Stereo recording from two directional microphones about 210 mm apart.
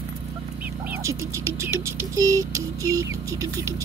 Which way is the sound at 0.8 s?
15° right (ahead or behind).